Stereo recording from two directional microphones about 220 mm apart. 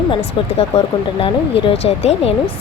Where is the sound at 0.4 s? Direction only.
25° left (ahead or behind).